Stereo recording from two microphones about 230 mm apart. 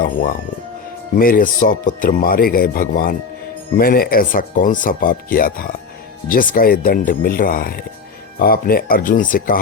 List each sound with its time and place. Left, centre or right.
0.0 s speech: left